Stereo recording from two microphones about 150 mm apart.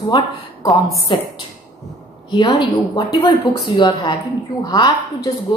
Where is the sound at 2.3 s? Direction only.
30° left (ahead or behind).